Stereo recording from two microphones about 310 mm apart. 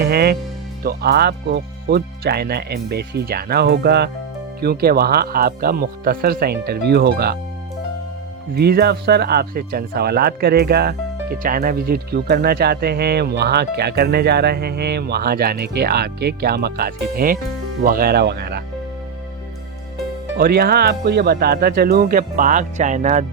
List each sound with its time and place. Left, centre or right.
0.0 s speech: right
8.5 s speech: right
20.3 s speech: right